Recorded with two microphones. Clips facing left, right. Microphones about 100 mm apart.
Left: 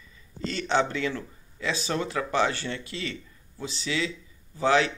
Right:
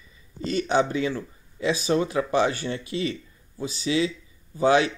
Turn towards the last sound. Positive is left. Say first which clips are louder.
# right 3 dB
turn(degrees=-20)  # may be behind; listen again after turning